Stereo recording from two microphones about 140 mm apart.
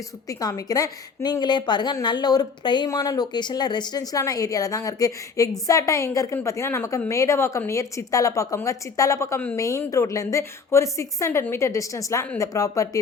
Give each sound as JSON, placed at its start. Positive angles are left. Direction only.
{"t": 0.3, "sound": "a woman's voice", "side_deg": 25}